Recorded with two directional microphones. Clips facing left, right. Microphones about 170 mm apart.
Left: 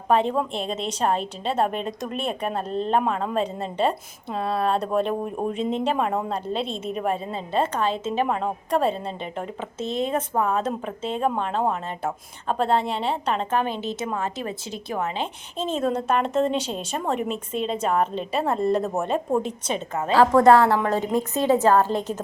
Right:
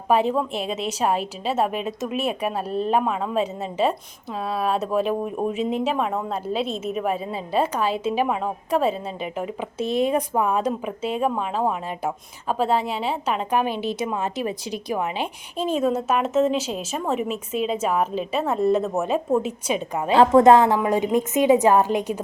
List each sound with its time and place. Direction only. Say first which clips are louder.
0.1 s a woman's voice: right 1 dB; 5° right (ahead or behind)
9.8 s speech: right 4 dB; 20° left (ahead or behind)
10.1 s a woman's voice: right 2 dB; 15° right (ahead or behind)